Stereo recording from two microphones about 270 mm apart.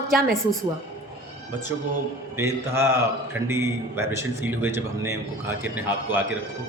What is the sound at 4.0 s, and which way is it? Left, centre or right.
Speech, centre.